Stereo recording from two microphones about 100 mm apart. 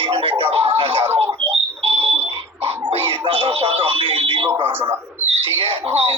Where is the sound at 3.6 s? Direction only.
65° right (ahead or behind).